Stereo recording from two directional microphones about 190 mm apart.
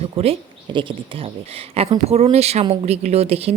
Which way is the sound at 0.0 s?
30° right (ahead or behind).